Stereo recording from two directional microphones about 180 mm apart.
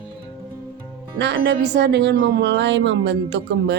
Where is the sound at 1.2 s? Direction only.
65° right (ahead or behind).